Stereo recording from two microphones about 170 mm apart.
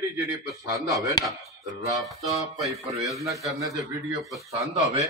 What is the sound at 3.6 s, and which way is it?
Speech, 20° right (ahead or behind).